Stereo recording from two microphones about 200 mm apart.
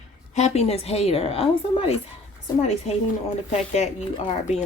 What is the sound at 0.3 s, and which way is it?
Speech, 35° left (ahead or behind).